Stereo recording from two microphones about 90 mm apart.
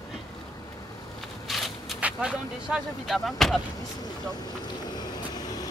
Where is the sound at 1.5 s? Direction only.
Centre (ahead or behind).